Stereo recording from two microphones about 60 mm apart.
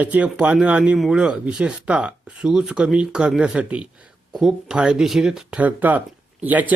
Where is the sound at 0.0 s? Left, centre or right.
Right; by 5.5 s centre.